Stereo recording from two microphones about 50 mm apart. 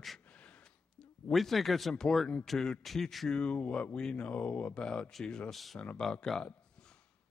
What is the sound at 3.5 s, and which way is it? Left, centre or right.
Speech, left.